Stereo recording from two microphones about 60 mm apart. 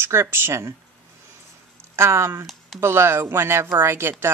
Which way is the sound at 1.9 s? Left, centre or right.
Right.